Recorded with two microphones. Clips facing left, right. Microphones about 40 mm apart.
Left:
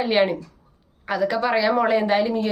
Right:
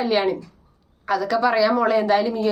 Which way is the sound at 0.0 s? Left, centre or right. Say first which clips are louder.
Left 1 dB; left.